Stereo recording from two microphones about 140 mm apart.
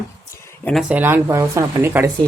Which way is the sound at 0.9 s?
15° right (ahead or behind).